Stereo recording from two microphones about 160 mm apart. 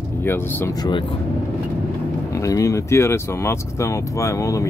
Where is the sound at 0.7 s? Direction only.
30° left (ahead or behind).